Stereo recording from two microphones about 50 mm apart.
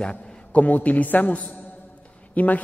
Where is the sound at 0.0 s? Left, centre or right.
Left.